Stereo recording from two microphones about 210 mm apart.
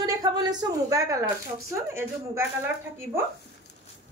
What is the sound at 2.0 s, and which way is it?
Speech, 10° right (ahead or behind).